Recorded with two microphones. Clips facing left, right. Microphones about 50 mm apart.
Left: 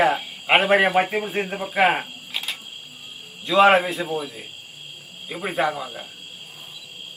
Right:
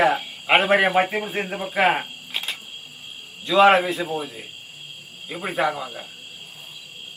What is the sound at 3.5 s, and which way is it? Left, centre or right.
A man's voice, centre.